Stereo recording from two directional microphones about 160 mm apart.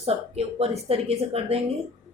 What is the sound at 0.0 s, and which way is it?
A woman's voice, 40° right (ahead or behind).